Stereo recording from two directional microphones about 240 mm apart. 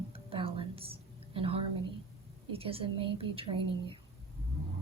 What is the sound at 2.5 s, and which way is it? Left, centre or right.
Speech, right.